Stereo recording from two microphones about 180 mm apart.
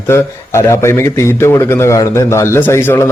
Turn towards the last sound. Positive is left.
turn(degrees=10)  # may be behind; listen again after turning